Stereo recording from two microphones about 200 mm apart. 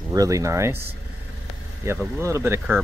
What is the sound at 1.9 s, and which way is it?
Speech, 10° right (ahead or behind).